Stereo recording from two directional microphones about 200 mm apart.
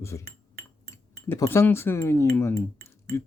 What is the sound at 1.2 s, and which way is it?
Speech, 15° left (ahead or behind).